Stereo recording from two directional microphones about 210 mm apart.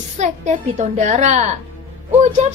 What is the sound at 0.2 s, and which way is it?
A woman's voice, 35° right (ahead or behind).